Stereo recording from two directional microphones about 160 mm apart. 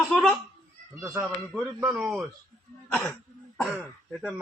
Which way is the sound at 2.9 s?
5° left (ahead or behind).